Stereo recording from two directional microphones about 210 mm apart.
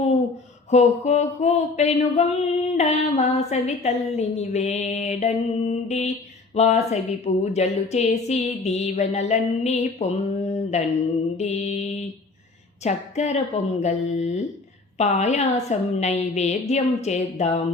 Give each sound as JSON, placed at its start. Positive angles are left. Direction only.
{"t": 0.7, "sound": "mantra", "side_deg": 30}
{"t": 14.9, "sound": "mantra", "side_deg": 35}